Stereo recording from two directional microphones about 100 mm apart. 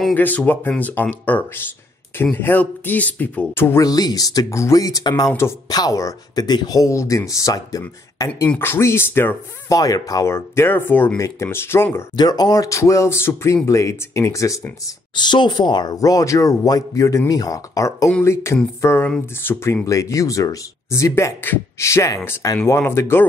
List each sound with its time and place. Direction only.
0.1 s speech: 15° left (ahead or behind)
3.8 s speech: 40° left (ahead or behind)
8.5 s speech: 25° left (ahead or behind)
9.7 s speech: 35° left (ahead or behind); by 11.1 s 20° left (ahead or behind)
11.1 s speech: 30° left (ahead or behind)
12.2 s speech: 45° left (ahead or behind)
15.1 s speech: 50° left (ahead or behind); by 23.2 s 25° left (ahead or behind)